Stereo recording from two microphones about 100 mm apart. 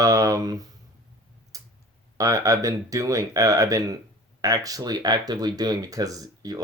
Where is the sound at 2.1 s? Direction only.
35° right (ahead or behind).